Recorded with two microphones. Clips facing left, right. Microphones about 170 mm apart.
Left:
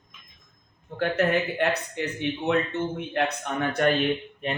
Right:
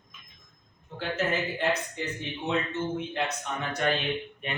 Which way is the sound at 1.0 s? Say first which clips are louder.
Left 6 dB; 60° left (ahead or behind).